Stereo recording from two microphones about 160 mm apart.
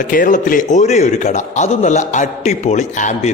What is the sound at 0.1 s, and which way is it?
A man's voice, 55° left (ahead or behind).